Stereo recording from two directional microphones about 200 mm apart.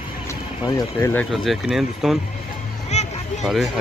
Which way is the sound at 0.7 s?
15° left (ahead or behind).